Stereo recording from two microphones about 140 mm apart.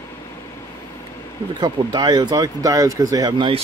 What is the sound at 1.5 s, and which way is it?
Speech, 30° right (ahead or behind).